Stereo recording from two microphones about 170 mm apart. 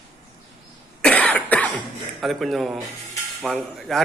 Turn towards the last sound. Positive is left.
turn(degrees=0)  # may be behind; listen again after turning